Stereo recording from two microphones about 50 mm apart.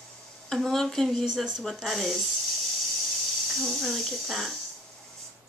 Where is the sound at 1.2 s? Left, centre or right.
Centre.